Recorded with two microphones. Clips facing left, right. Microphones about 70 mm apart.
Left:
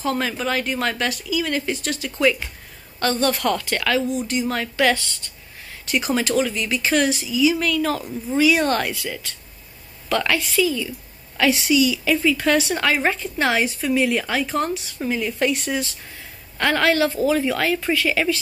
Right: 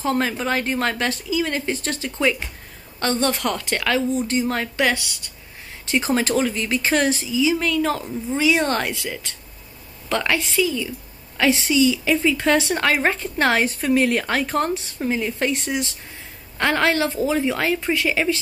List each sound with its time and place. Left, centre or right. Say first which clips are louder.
0.0 s a woman's voice: right 1 dB; right
5.9 s a woman's voice: right 1 dB; right
15.0 s a woman's voice: left 1 dB; right